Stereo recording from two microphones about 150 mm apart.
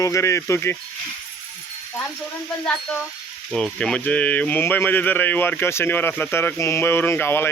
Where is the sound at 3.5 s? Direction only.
5° left (ahead or behind).